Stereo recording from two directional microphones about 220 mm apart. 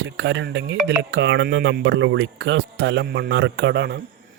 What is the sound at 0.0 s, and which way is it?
Speech, 55° right (ahead or behind).